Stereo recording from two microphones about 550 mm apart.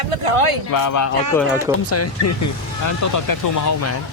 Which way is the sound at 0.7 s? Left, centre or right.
Left.